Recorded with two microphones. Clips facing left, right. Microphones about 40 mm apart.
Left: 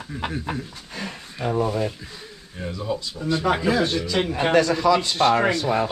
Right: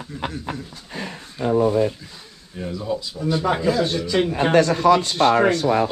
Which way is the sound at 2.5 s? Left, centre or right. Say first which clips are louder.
Right 2 dB; centre.